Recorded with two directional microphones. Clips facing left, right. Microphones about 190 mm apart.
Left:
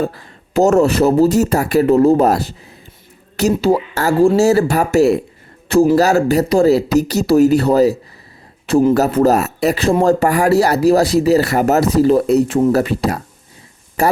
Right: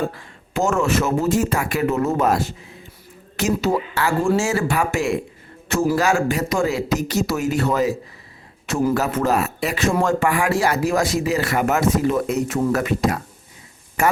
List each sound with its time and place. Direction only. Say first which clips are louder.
0.1 s a man's voice: left 7 dB; 35° left (ahead or behind)